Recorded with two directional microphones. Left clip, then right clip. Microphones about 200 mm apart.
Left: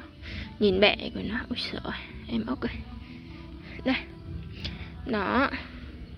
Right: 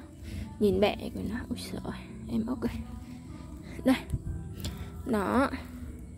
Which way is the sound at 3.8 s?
25° right (ahead or behind).